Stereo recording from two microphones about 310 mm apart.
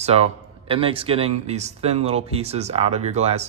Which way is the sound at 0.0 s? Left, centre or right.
Centre.